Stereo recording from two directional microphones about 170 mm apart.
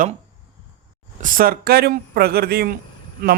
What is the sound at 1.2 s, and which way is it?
A man's voice, 55° right (ahead or behind).